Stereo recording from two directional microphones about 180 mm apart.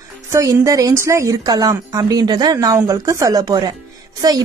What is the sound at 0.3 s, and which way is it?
Speech, 15° right (ahead or behind).